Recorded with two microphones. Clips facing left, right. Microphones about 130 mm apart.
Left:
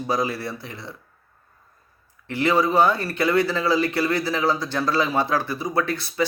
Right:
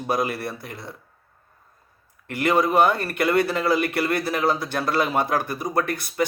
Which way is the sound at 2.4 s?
55° right (ahead or behind).